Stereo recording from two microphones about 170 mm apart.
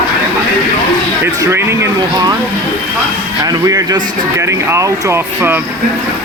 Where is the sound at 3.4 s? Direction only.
20° right (ahead or behind).